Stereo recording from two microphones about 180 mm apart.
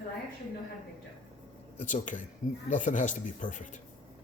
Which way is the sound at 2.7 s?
45° left (ahead or behind).